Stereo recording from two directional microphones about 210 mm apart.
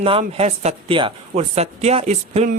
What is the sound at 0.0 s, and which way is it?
A woman's voice, 30° right (ahead or behind).